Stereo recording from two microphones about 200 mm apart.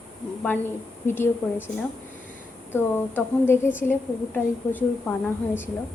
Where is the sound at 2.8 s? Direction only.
10° left (ahead or behind).